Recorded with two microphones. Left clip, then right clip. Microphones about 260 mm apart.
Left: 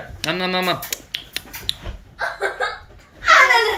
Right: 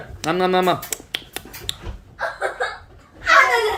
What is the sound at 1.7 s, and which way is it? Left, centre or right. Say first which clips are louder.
Dog: left 4 dB; centre.